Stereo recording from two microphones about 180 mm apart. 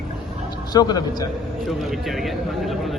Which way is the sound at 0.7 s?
20° left (ahead or behind).